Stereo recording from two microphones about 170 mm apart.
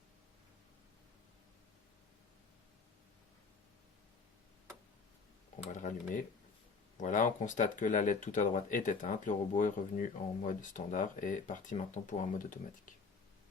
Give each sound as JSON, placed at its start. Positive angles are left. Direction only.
{"t": 5.7, "sound": "speech", "side_deg": 50}